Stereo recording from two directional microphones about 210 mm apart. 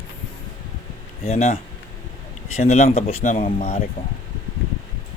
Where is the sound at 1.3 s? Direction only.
35° left (ahead or behind).